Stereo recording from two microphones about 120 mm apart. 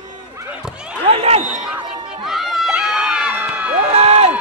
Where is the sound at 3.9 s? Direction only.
60° right (ahead or behind).